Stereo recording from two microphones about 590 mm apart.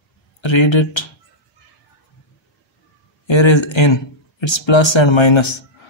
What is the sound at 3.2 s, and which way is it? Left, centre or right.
Speech, left.